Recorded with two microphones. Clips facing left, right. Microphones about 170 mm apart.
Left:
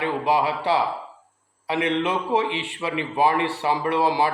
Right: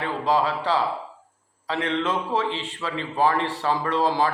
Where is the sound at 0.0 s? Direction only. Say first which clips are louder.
Left 1 dB; 15° left (ahead or behind).